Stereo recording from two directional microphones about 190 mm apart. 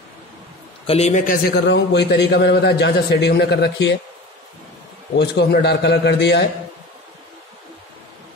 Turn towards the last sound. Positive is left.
turn(degrees=60)  # may be behind; listen again after turning